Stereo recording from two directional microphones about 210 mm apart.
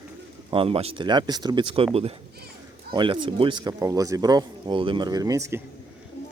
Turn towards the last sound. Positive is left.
turn(degrees=-15)  # may be behind; listen again after turning